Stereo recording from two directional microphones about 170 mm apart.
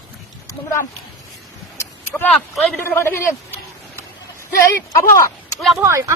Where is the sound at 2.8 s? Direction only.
15° left (ahead or behind).